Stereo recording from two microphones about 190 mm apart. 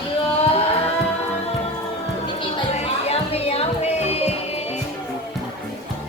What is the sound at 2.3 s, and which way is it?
Music, 35° left (ahead or behind).